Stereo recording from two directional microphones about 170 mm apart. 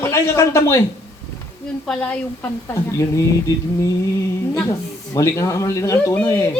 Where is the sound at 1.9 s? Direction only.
10° left (ahead or behind).